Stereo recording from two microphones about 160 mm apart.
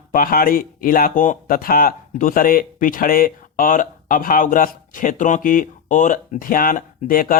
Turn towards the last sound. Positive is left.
turn(degrees=60)  # may be behind; listen again after turning